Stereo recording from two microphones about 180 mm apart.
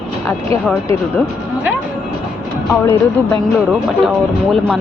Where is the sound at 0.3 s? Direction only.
5° left (ahead or behind).